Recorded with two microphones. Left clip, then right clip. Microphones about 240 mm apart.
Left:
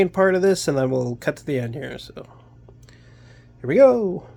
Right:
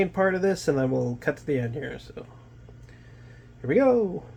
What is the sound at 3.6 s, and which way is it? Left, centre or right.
Speech, left.